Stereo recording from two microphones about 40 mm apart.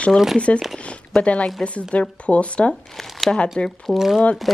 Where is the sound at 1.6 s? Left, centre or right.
Left.